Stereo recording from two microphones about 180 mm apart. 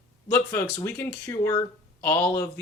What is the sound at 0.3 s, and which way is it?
Speech, 15° left (ahead or behind).